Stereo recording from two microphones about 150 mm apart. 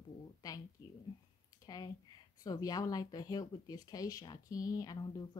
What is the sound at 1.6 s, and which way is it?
A woman's voice, 25° left (ahead or behind).